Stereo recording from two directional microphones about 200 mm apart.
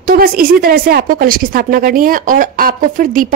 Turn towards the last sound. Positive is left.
turn(degrees=-40)  # may be behind; listen again after turning